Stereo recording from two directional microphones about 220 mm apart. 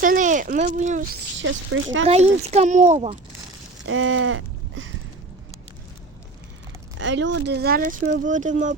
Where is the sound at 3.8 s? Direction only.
65° right (ahead or behind).